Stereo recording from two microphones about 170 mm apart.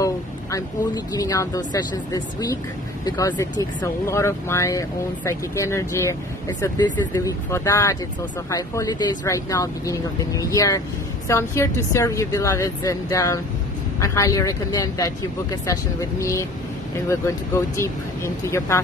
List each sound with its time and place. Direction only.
0.0 s speech: 20° left (ahead or behind)
17.7 s speech: 15° left (ahead or behind)